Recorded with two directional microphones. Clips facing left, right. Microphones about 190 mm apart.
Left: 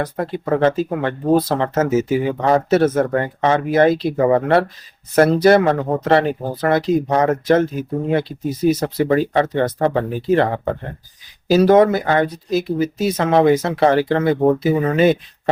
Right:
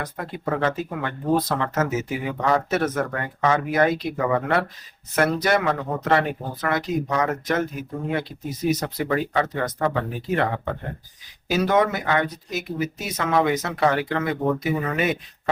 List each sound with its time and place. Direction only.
0.0 s speech: 35° left (ahead or behind)